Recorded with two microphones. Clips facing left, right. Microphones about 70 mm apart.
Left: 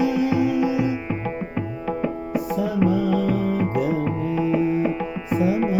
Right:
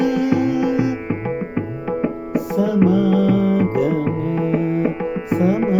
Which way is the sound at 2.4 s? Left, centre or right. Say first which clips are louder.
Right 5 dB; right.